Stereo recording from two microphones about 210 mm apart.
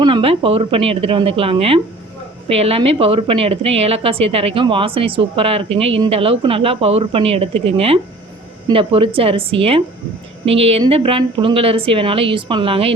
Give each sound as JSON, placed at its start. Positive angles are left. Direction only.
{"t": 0.0, "sound": "a woman's voice", "side_deg": -25}